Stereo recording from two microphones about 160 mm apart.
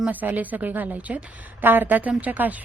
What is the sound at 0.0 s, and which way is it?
Speech, 10° right (ahead or behind).